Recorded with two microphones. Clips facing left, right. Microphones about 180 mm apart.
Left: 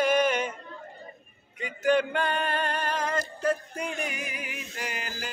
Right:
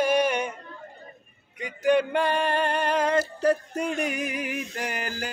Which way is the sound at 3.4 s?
40° right (ahead or behind).